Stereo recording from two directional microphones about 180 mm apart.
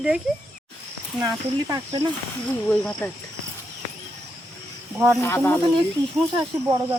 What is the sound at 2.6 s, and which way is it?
Speech, 10° left (ahead or behind).